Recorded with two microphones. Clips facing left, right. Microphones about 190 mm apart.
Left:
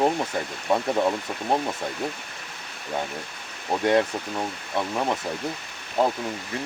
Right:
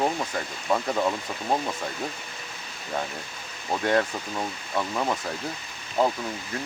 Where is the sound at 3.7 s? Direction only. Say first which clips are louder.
Left 3 dB; 10° left (ahead or behind).